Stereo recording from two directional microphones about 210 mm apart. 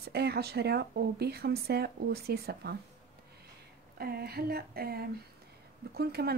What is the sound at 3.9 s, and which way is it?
Speech, 50° right (ahead or behind).